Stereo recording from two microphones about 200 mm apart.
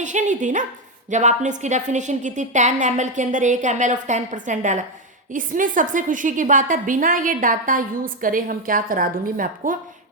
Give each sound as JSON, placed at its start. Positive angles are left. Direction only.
{"t": 0.0, "sound": "a woman's voice", "side_deg": -35}